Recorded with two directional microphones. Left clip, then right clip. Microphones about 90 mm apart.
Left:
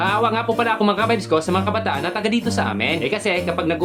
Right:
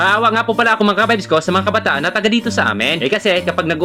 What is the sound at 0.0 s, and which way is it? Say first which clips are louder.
Speech: right 6 dB; 30° right (ahead or behind).